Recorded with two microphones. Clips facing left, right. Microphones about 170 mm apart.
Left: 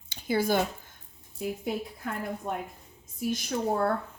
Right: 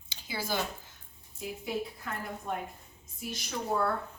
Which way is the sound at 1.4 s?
35° left (ahead or behind).